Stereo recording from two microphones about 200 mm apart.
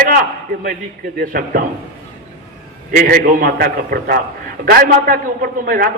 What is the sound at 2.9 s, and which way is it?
A man's voice, 45° right (ahead or behind).